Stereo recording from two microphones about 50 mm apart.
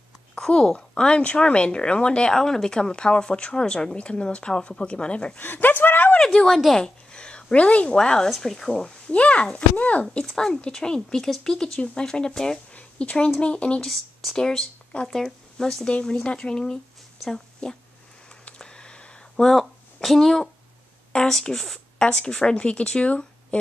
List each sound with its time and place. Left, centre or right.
0.3 s a woman's voice: centre
5.4 s speech: left
6.2 s speech: centre
6.7 s a woman's voice: centre
7.9 s speech: centre
9.1 s a woman's voice: left
10.1 s speech: centre
12.7 s a sound: left
13.3 s a woman's voice: left
13.7 s a woman's voice: centre
18.4 s a sound: centre
19.5 s speech: centre; by 23.6 s left